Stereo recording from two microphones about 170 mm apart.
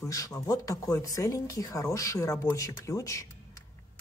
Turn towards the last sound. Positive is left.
turn(degrees=20)  # may be behind; listen again after turning